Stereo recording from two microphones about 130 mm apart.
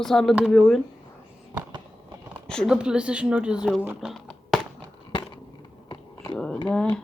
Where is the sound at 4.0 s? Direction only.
Centre (ahead or behind).